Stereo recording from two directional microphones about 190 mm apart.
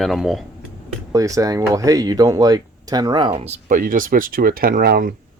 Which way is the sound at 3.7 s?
45° right (ahead or behind).